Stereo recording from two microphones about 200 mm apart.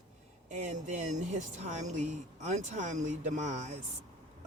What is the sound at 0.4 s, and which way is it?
Speech, 35° right (ahead or behind).